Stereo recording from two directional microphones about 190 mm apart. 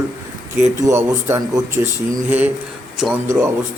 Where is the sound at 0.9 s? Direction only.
15° right (ahead or behind).